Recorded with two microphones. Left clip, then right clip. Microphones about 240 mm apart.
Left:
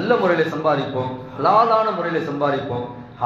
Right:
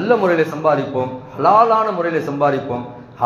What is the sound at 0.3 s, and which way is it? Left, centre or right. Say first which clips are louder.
Speech: right 3 dB; right.